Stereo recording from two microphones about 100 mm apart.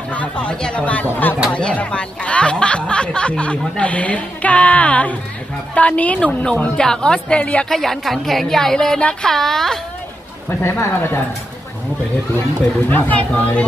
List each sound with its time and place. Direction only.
0.1 s a woman's voice: 15° left (ahead or behind)
10.6 s speech: 25° left (ahead or behind)
12.9 s a woman's voice: 15° left (ahead or behind)